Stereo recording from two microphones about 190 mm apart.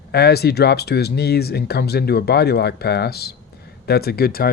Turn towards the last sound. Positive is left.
turn(degrees=55)  # may be behind; listen again after turning